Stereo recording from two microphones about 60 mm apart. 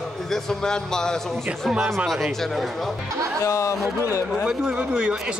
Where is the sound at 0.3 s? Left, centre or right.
Centre.